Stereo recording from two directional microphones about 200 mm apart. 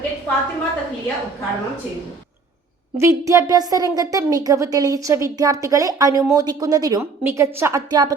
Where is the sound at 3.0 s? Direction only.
15° right (ahead or behind).